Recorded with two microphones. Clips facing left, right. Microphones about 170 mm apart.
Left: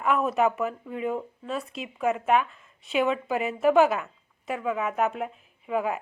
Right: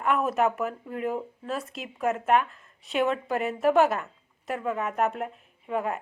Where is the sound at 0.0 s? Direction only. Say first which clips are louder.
Left 1 dB; centre (ahead or behind).